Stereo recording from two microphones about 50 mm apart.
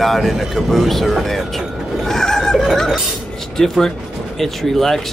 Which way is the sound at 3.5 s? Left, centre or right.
Centre.